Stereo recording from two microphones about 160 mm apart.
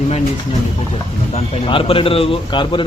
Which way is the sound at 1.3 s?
35° left (ahead or behind).